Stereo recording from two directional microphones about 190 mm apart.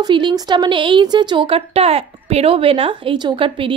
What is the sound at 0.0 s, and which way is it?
A woman's voice, 25° right (ahead or behind).